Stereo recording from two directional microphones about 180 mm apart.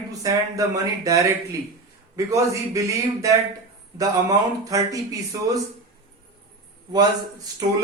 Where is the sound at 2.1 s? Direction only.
15° right (ahead or behind).